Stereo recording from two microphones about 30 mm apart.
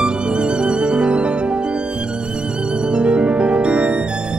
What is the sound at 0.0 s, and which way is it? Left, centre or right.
Music, right.